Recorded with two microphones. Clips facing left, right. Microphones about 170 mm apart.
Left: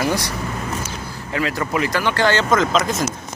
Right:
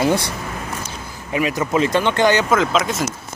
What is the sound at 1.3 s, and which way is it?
Speech, 20° right (ahead or behind).